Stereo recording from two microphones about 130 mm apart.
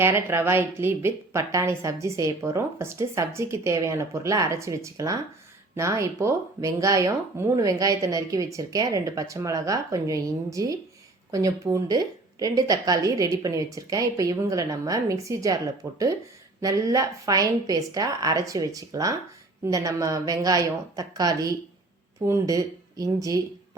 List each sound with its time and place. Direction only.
0.0 s a woman's voice: 20° right (ahead or behind)